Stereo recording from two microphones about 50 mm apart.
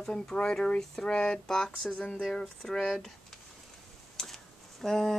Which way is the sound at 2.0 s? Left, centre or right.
Left.